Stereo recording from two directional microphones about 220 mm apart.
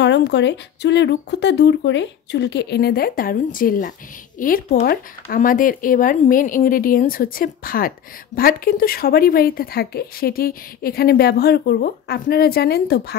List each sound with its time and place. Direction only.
0.0 s a woman's voice: 50° left (ahead or behind)